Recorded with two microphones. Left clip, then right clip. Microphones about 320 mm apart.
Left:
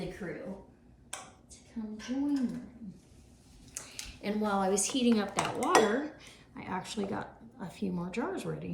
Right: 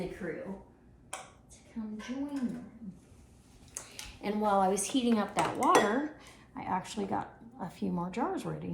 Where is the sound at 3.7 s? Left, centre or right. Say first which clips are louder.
Left 1 dB; centre.